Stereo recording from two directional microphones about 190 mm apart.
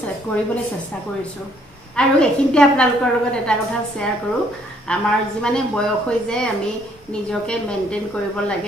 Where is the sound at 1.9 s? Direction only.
5° left (ahead or behind).